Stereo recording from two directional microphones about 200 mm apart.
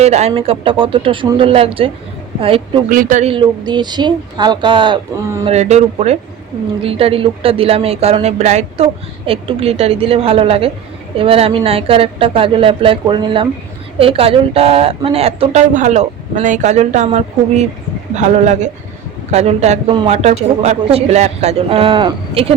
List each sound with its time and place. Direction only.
0.0 s speech: 35° right (ahead or behind)
2.9 s a woman's voice: 40° right (ahead or behind)
3.3 s a woman's voice: 20° right (ahead or behind)